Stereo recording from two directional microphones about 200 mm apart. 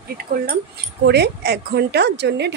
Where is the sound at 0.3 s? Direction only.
45° right (ahead or behind).